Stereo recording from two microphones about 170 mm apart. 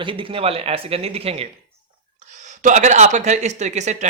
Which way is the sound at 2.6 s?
45° right (ahead or behind).